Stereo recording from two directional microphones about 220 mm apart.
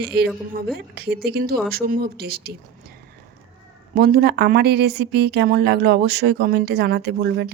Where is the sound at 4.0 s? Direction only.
45° right (ahead or behind).